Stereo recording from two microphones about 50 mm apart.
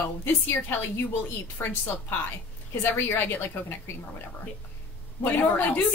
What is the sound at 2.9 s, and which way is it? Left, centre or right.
Speech, left.